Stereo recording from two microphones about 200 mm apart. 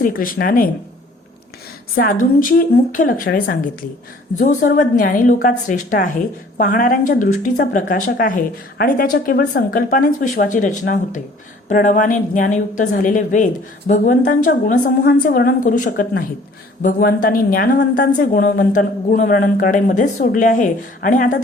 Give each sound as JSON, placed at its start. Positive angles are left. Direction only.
{"t": 0.0, "sound": "a woman's voice", "side_deg": 45}
{"t": 2.0, "sound": "a woman's voice", "side_deg": 45}